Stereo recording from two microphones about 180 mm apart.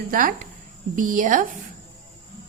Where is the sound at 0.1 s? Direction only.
50° right (ahead or behind).